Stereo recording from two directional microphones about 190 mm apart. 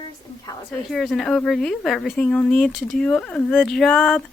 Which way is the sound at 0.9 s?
Centre (ahead or behind).